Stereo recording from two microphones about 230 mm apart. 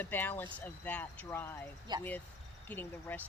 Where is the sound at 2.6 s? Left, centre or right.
Centre.